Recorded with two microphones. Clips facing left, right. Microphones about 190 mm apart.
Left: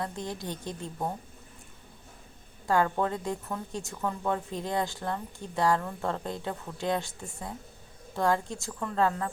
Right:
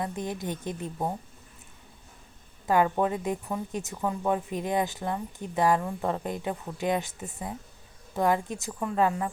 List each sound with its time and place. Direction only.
0.0 s a woman's voice: 20° right (ahead or behind)
2.6 s a woman's voice: 20° right (ahead or behind)